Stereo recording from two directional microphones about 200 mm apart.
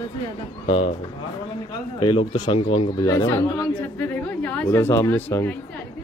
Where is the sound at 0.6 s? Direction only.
25° left (ahead or behind).